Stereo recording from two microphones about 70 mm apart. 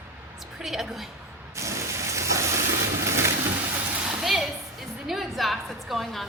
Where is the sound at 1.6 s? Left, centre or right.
Right.